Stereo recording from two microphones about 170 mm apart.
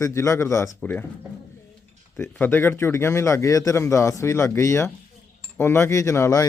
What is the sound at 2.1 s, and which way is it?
Speech, 10° left (ahead or behind).